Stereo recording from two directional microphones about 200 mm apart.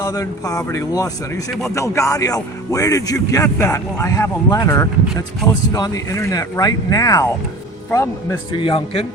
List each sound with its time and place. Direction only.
0.0 s a man's voice: 15° left (ahead or behind)